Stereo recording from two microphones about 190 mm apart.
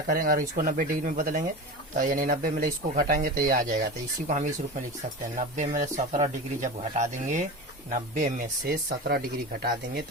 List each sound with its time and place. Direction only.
0.1 s speech: 45° right (ahead or behind)
5.4 s speech: 40° right (ahead or behind)